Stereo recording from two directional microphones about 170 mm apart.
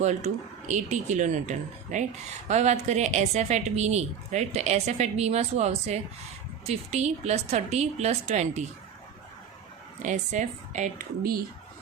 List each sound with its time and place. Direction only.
0.0 s a woman's voice: 45° right (ahead or behind)
10.0 s speech: 45° right (ahead or behind)